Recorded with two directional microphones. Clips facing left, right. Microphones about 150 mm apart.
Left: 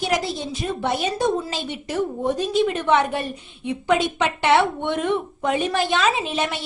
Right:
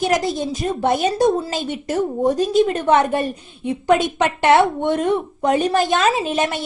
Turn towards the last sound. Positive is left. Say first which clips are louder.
# right 4 dB
turn(degrees=-45)  # may be behind; listen again after turning